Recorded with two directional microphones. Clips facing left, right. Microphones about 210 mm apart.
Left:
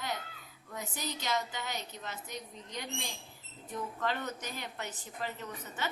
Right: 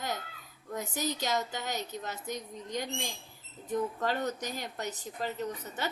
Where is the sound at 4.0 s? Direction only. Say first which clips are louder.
Right 4 dB; 40° right (ahead or behind).